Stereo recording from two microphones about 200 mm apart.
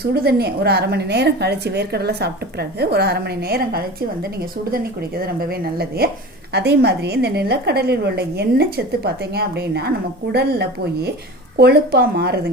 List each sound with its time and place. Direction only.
0.1 s a woman's voice: 50° right (ahead or behind)